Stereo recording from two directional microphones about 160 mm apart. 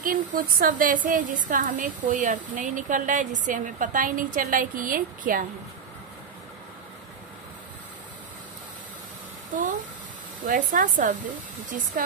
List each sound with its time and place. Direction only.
0.0 s a woman's voice: 60° right (ahead or behind)
9.6 s a sound: 55° right (ahead or behind)
10.4 s a woman's voice: 55° right (ahead or behind)